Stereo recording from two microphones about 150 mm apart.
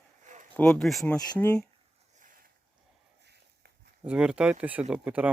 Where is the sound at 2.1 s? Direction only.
65° right (ahead or behind).